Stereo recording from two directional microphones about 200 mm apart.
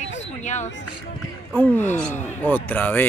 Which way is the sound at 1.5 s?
10° left (ahead or behind).